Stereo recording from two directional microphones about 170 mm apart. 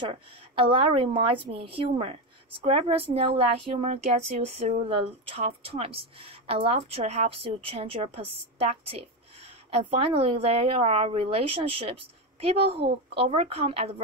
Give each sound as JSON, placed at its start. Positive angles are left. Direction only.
{"t": 0.1, "sound": "speech", "side_deg": -30}